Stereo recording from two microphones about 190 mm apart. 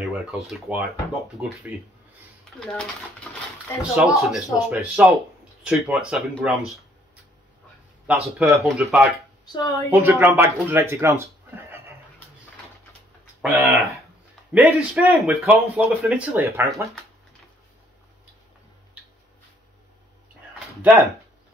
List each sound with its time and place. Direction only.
0.0 s speech: 5° right (ahead or behind)
2.6 s speech: 5° left (ahead or behind)
3.9 s speech: centre (ahead or behind)
8.1 s speech: 5° right (ahead or behind)
9.5 s a woman's voice: 15° left (ahead or behind)
9.9 s speech: 10° right (ahead or behind)
13.4 s speech: centre (ahead or behind)
20.5 s a sound: 10° right (ahead or behind)